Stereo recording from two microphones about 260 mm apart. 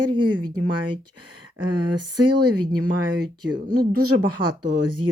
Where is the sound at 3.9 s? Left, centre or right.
Right.